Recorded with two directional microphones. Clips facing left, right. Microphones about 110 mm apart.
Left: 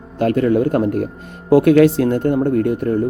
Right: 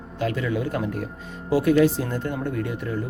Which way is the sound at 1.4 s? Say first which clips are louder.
Left 8 dB; 60° left (ahead or behind).